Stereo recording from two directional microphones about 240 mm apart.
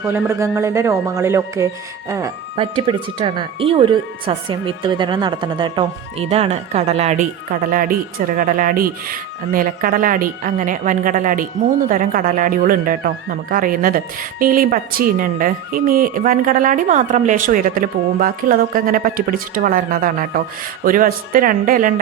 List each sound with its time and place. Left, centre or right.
0.0 s speech: centre; by 22.0 s right